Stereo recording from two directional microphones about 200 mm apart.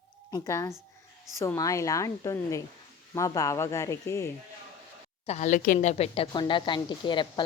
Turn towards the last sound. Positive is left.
turn(degrees=20)  # may be behind; listen again after turning